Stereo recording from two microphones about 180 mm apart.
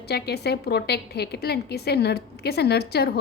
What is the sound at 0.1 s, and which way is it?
A woman's voice, 65° left (ahead or behind).